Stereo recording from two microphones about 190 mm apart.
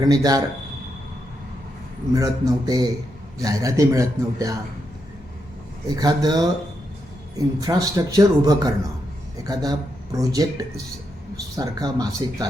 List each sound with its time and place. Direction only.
0.0 s speech: 20° right (ahead or behind)
2.1 s a man's voice: 20° right (ahead or behind)
5.9 s speech: 20° right (ahead or behind)
11.5 s speech: 20° right (ahead or behind)